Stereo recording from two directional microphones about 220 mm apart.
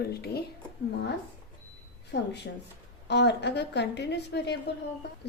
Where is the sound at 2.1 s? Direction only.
50° left (ahead or behind).